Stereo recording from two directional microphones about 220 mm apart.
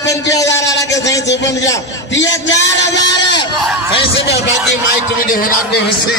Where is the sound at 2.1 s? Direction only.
55° left (ahead or behind).